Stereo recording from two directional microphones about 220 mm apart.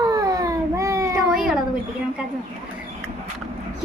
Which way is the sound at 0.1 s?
15° right (ahead or behind).